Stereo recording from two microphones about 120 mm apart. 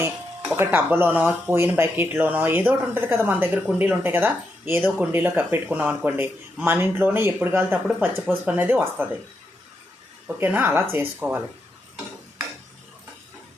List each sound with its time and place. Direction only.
0.6 s speech: 20° right (ahead or behind)
10.2 s speech: 15° right (ahead or behind)